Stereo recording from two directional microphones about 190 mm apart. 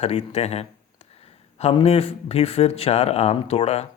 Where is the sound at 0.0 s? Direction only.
35° left (ahead or behind).